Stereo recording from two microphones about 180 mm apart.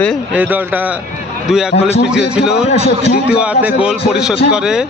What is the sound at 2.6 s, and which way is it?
Speech, 35° left (ahead or behind).